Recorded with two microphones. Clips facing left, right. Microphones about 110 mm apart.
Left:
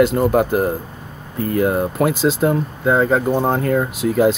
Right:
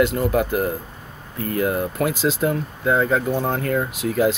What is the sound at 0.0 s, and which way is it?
Speech, 30° left (ahead or behind).